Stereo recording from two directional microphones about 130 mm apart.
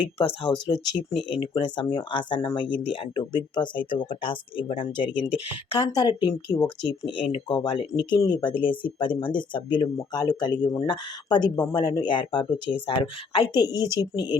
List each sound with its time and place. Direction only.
0.2 s speech: 40° left (ahead or behind)